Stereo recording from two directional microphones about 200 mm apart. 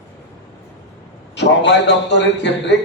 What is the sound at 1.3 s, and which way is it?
A man's voice, 60° left (ahead or behind).